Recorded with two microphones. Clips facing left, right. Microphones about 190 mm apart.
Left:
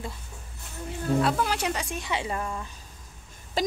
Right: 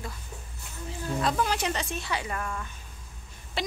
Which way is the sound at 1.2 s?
5° left (ahead or behind).